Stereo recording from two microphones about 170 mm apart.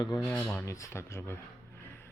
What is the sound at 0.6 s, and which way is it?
Speech, 20° left (ahead or behind).